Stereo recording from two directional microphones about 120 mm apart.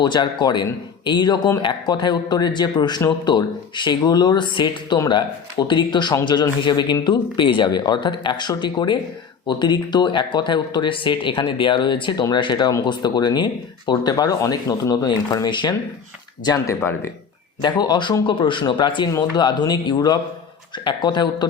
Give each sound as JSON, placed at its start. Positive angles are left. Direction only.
{"t": 0.0, "sound": "speech", "side_deg": 40}